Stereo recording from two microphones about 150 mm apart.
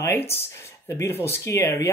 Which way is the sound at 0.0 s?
15° left (ahead or behind).